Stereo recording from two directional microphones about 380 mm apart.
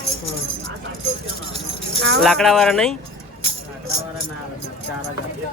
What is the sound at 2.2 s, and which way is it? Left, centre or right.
Speech, centre.